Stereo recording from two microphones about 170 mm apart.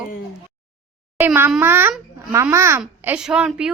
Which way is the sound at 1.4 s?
10° right (ahead or behind).